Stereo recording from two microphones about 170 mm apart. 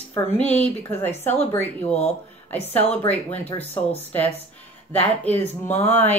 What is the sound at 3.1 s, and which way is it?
Speech, 10° left (ahead or behind).